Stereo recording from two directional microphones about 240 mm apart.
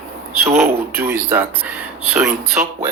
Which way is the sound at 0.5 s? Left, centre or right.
Centre.